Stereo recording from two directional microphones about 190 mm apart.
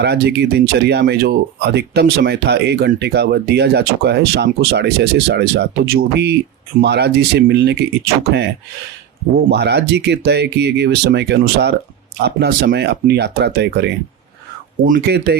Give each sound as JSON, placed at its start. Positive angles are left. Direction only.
{"t": 0.0, "sound": "speech", "side_deg": -60}
{"t": 9.5, "sound": "speech", "side_deg": -60}
{"t": 14.9, "sound": "speech", "side_deg": -60}